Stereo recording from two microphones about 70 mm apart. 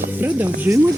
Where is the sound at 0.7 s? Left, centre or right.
Right.